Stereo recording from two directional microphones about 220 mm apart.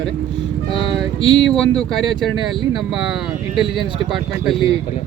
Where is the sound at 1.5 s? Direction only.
5° left (ahead or behind).